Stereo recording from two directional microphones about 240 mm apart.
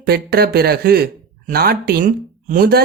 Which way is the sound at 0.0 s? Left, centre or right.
Right.